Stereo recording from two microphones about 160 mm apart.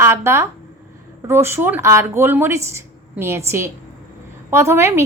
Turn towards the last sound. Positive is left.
turn(degrees=-15)  # may be behind; listen again after turning